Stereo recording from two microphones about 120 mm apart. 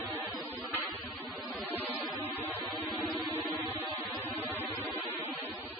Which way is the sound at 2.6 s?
Centre (ahead or behind).